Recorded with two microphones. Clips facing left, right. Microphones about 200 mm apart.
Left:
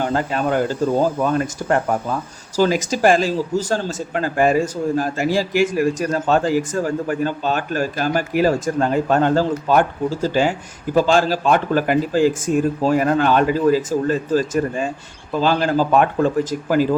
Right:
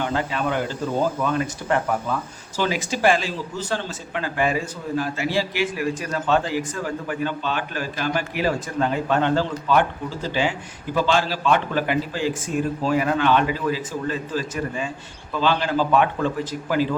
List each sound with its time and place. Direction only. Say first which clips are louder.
0.0 s speech: left 4 dB; 40° left (ahead or behind)